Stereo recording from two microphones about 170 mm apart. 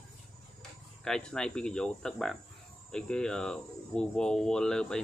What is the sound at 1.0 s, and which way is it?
Speech, 5° left (ahead or behind).